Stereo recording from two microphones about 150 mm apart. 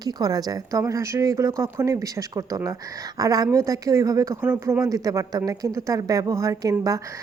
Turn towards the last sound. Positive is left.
turn(degrees=-25)  # may be behind; listen again after turning